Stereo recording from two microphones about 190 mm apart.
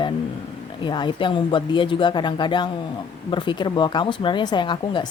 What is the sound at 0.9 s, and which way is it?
Speech, 25° left (ahead or behind).